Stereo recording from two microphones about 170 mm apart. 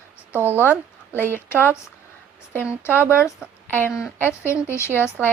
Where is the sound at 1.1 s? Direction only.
10° left (ahead or behind).